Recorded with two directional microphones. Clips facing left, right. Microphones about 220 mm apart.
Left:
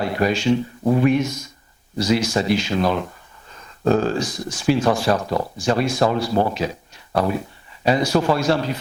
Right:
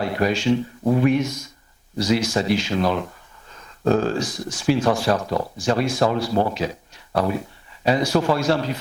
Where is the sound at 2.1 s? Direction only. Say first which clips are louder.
Left 1 dB; 10° left (ahead or behind).